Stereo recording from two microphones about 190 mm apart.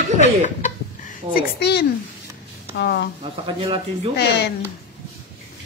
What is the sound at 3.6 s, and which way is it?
Speech, 30° right (ahead or behind).